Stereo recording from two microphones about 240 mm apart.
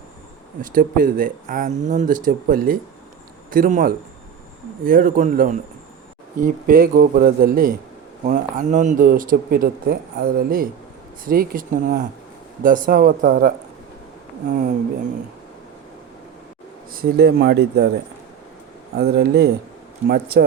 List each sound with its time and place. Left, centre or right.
0.6 s speech: right
14.5 s speech: right
16.9 s speech: right
18.9 s speech: right